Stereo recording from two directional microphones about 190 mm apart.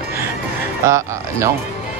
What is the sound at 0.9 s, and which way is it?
Speech, 15° right (ahead or behind).